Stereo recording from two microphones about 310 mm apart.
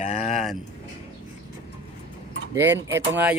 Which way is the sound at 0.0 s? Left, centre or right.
Left.